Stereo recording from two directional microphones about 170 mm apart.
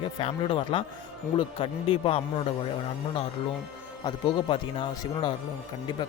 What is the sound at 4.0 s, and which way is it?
Speech, 25° left (ahead or behind).